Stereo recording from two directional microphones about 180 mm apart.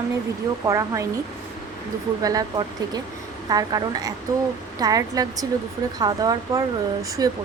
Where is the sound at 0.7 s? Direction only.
15° right (ahead or behind).